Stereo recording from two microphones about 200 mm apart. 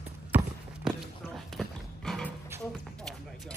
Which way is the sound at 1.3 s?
Centre (ahead or behind).